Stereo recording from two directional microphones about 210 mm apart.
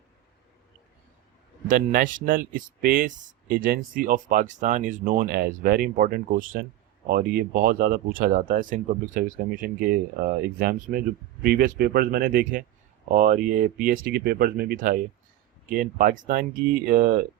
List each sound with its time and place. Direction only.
1.6 s speech: 40° right (ahead or behind)